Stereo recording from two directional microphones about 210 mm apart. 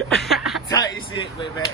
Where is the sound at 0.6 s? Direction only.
15° left (ahead or behind).